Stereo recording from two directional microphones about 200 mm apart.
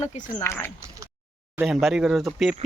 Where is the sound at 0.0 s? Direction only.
35° left (ahead or behind).